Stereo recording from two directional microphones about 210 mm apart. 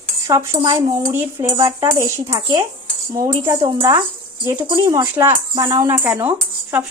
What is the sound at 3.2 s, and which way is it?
Speech, 15° right (ahead or behind).